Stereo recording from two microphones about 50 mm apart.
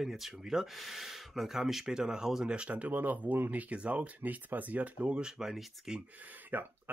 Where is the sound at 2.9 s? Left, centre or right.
Right.